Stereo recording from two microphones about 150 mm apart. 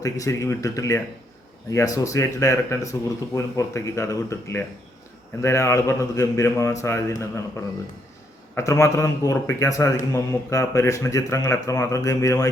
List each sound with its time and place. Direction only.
0.0 s speech: 20° left (ahead or behind)